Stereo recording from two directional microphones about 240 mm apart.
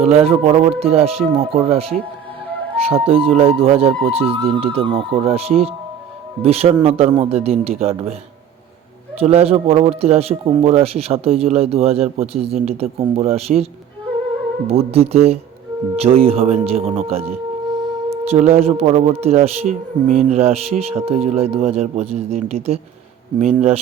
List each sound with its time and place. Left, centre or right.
0.0 s a man's voice: right
9.1 s a man's voice: right
14.7 s a man's voice: right